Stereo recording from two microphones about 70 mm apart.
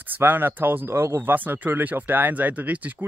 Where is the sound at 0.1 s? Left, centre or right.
Right.